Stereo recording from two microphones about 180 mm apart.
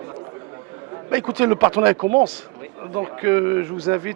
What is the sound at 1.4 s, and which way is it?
A man's voice, 15° right (ahead or behind).